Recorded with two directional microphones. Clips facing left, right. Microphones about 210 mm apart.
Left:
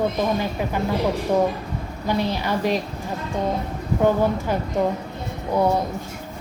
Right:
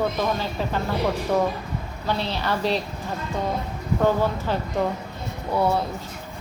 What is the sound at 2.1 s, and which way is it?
Speech, 15° left (ahead or behind).